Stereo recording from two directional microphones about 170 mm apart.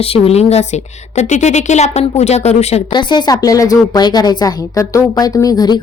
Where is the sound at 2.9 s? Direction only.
25° left (ahead or behind).